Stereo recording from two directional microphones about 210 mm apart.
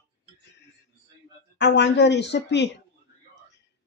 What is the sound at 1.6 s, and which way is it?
Speech, 55° left (ahead or behind).